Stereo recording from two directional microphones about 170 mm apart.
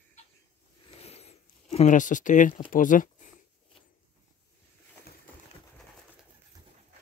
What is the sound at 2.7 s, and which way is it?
Speech, 50° left (ahead or behind).